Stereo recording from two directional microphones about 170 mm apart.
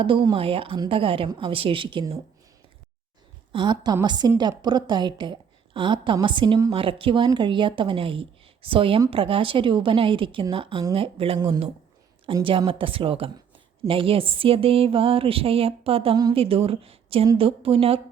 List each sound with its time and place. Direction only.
0.0 s speech: 30° right (ahead or behind)
3.5 s a woman's voice: 25° right (ahead or behind)
16.1 s a woman's voice: 25° right (ahead or behind)
16.4 s speech: 35° right (ahead or behind)